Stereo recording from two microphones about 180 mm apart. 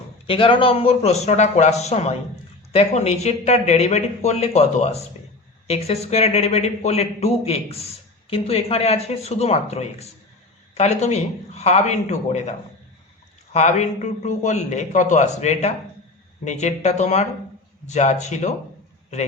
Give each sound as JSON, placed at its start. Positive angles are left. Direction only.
{"t": 0.3, "sound": "a man's voice", "side_deg": 30}